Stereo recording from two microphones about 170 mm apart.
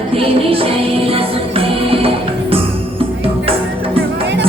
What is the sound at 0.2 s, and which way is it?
Music, 35° right (ahead or behind).